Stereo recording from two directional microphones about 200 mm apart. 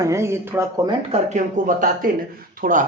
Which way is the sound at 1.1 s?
40° right (ahead or behind).